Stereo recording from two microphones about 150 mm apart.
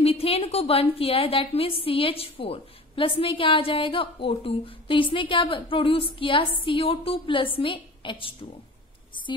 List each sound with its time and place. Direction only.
0.0 s a woman's voice: 40° left (ahead or behind)